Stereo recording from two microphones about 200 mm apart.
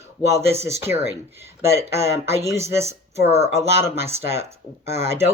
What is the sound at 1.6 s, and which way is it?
Speech, 15° right (ahead or behind).